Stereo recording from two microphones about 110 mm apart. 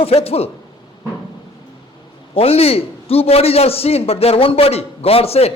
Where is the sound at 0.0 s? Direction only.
65° left (ahead or behind).